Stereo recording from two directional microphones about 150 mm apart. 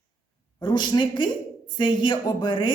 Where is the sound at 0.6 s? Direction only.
30° left (ahead or behind).